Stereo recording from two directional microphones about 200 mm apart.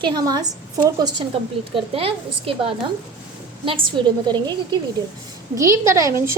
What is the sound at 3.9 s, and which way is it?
A woman's voice, 20° right (ahead or behind).